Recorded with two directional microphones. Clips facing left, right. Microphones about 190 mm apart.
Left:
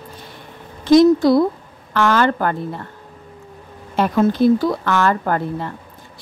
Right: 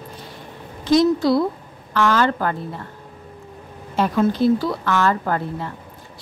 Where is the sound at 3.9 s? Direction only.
55° left (ahead or behind).